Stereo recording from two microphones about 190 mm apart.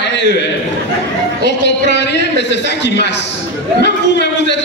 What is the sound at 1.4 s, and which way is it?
A man's voice, 65° left (ahead or behind).